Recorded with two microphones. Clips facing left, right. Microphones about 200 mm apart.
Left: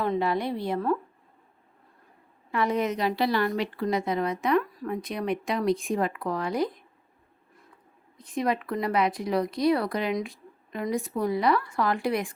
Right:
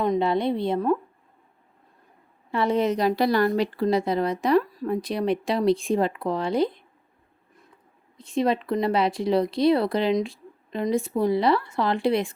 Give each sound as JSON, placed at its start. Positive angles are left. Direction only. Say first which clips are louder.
{"t": 0.0, "sound": "speech", "louder": "right 4 dB", "side_deg": -20}
{"t": 2.5, "sound": "a woman's voice", "louder": "right 4 dB", "side_deg": -30}
{"t": 8.2, "sound": "speech", "louder": "right 4 dB", "side_deg": -25}